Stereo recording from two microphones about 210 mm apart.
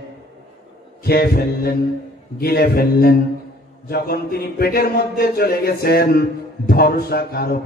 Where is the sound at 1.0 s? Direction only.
45° left (ahead or behind).